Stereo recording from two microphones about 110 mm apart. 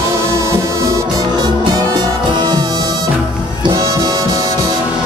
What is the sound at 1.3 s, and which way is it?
Music, 40° right (ahead or behind).